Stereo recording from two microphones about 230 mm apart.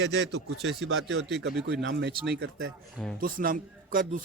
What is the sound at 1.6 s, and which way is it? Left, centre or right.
Speech, right.